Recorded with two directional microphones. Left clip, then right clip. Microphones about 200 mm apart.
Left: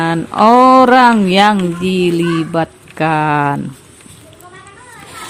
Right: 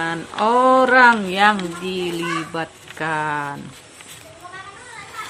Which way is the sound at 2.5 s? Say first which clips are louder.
Left 10 dB; 40° left (ahead or behind).